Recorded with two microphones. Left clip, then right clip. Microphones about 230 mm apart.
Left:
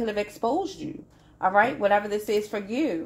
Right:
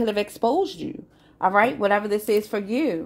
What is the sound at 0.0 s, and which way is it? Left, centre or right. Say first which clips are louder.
A woman's voice: right 4 dB; right.